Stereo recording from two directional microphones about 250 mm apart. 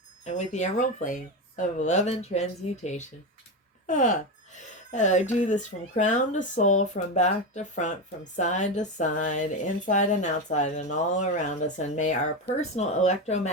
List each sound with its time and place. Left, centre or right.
0.3 s speech: left